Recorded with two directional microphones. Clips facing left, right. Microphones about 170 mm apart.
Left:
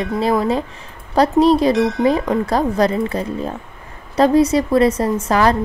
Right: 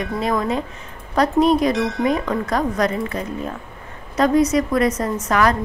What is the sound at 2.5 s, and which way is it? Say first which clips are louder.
A woman's voice: left 3 dB; 30° left (ahead or behind).